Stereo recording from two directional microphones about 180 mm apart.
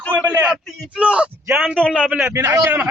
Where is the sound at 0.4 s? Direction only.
Centre (ahead or behind).